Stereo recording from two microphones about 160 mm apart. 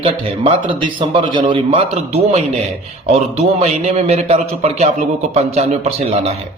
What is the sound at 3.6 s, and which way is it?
A man's voice, 40° right (ahead or behind).